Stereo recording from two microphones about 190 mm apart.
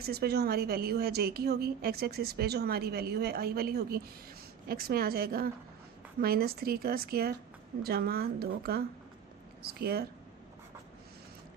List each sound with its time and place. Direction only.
0.0 s a woman's voice: 55° right (ahead or behind)